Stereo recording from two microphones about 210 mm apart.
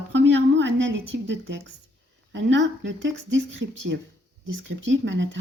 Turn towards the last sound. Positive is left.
turn(degrees=-60)  # may be behind; listen again after turning